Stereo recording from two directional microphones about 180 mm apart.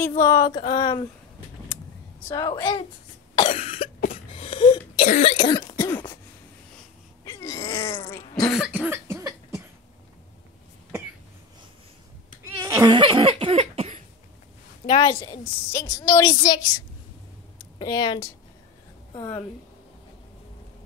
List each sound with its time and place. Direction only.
0.2 s speech: 20° left (ahead or behind)
2.2 s speech: 20° left (ahead or behind)
3.3 s cough: 30° left (ahead or behind)
5.0 s cough: 40° left (ahead or behind)
5.5 s throat clearing: 20° left (ahead or behind)
5.9 s cough: 10° left (ahead or behind)
7.2 s a sound: 15° left (ahead or behind)
8.2 s cough: 25° left (ahead or behind)
8.5 s cough: 5° right (ahead or behind)
12.4 s cough: 15° right (ahead or behind); by 14.0 s 35° right (ahead or behind)
14.9 s a woman's voice: 25° left (ahead or behind)
17.7 s a woman's voice: 20° left (ahead or behind)